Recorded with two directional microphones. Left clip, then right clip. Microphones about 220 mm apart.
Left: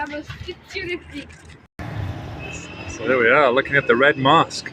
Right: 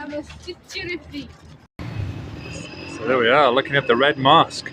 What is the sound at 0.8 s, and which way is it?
Speech, 40° right (ahead or behind).